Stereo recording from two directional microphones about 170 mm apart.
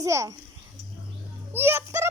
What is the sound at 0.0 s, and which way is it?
Speech, 20° right (ahead or behind).